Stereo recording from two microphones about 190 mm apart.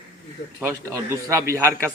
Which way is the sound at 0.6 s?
15° right (ahead or behind).